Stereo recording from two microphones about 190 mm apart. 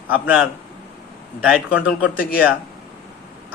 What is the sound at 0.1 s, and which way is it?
Speech, 5° right (ahead or behind).